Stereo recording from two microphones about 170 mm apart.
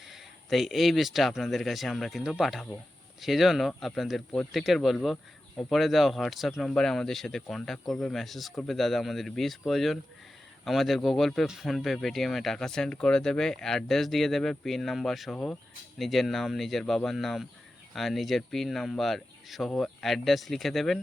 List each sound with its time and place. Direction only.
0.0 s speech: centre (ahead or behind)